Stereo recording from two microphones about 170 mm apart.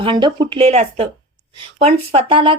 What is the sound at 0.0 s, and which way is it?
Speech, 25° right (ahead or behind).